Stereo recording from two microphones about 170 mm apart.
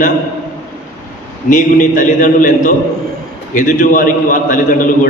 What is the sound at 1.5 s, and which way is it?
A man's voice, 50° left (ahead or behind).